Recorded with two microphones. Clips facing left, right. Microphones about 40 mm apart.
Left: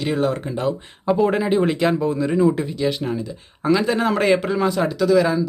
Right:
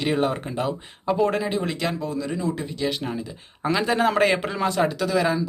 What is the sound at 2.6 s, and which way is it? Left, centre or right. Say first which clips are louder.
Speech: left 5 dB; centre.